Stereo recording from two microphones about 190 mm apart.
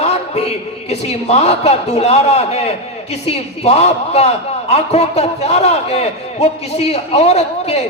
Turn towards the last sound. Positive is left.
turn(degrees=35)  # may be behind; listen again after turning